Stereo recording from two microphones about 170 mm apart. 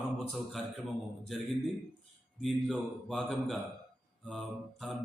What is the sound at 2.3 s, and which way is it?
Speech, centre (ahead or behind).